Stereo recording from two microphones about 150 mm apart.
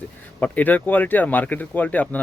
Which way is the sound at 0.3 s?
10° left (ahead or behind).